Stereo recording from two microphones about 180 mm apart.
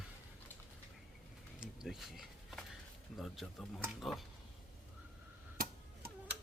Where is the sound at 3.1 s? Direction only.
Centre (ahead or behind).